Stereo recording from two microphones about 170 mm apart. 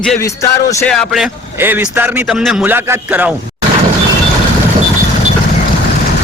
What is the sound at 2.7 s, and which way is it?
Speech, 15° right (ahead or behind).